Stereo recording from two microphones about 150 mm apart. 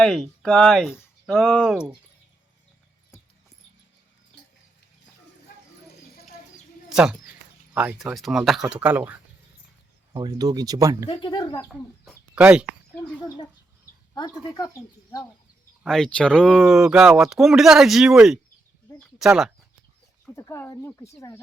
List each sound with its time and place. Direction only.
0.0 s speech: 5° left (ahead or behind)
6.9 s speech: 5° right (ahead or behind)
10.1 s speech: 30° right (ahead or behind)
11.1 s speech: 30° left (ahead or behind)
11.7 s speech: 5° right (ahead or behind)
14.1 s speech: 25° left (ahead or behind)
15.8 s speech: 5° left (ahead or behind)
20.3 s speech: 20° left (ahead or behind)